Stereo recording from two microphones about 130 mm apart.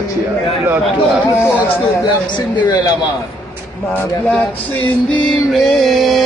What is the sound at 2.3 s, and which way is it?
Speech, 35° left (ahead or behind).